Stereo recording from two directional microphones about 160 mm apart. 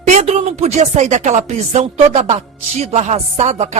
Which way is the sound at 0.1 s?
40° right (ahead or behind).